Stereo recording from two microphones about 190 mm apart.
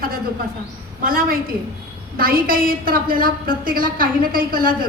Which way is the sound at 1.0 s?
50° right (ahead or behind).